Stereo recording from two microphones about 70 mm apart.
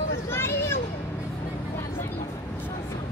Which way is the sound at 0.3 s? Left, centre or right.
Left.